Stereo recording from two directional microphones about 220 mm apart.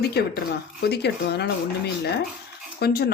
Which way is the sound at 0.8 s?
50° left (ahead or behind).